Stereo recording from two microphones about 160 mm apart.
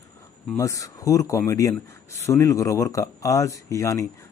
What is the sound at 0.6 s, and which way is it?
Speech, 20° left (ahead or behind).